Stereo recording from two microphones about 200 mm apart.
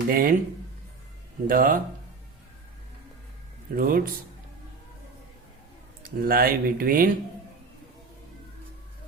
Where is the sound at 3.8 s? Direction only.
45° right (ahead or behind).